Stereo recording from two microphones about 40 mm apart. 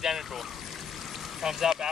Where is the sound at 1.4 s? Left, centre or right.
Centre.